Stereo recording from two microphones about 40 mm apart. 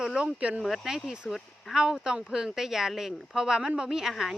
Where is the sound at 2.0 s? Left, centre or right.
Centre.